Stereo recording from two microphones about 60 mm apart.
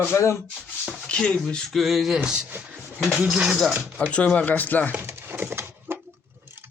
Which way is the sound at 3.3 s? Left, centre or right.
Centre.